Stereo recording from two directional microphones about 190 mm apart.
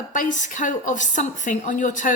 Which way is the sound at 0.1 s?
40° left (ahead or behind).